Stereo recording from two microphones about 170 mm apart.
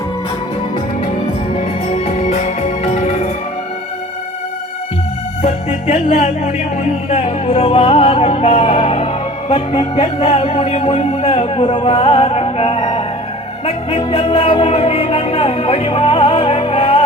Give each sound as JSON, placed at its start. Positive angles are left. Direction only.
{"t": 1.9, "sound": "music", "side_deg": 40}
{"t": 5.4, "sound": "music", "side_deg": 40}